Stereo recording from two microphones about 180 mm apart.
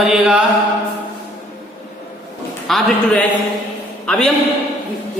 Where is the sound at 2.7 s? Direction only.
Centre (ahead or behind).